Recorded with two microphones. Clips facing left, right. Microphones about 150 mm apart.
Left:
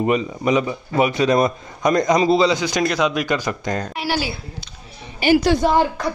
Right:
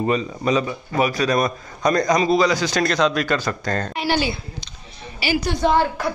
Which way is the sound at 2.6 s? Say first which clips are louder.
Even; 15° left (ahead or behind).